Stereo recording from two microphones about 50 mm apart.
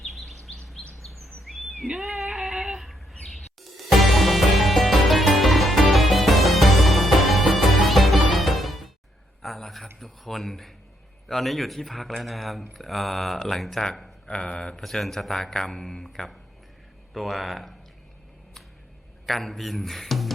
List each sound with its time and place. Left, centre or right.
0.0 s bird vocalization: centre
9.4 s a sound: centre
10.0 s speech: centre
14.3 s a man's voice: centre
14.8 s a man's voice: centre
19.2 s speech: centre